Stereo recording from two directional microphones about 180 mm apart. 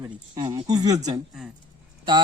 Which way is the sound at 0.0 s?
25° right (ahead or behind).